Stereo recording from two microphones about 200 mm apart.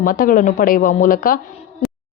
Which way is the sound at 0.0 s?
45° left (ahead or behind).